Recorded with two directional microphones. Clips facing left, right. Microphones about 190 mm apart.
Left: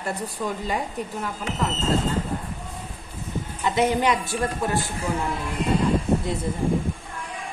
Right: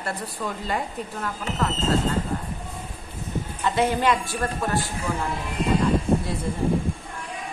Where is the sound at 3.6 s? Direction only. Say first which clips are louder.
Left 1 dB; 15° left (ahead or behind).